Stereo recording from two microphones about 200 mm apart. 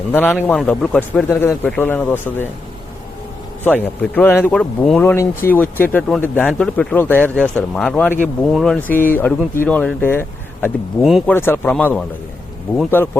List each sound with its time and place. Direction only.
0.1 s speech: 10° left (ahead or behind)
3.6 s speech: 10° left (ahead or behind)
11.0 s speech: centre (ahead or behind)
11.3 s speech: 10° left (ahead or behind)